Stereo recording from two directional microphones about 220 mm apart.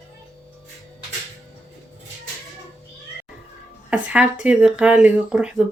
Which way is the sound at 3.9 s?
5° right (ahead or behind).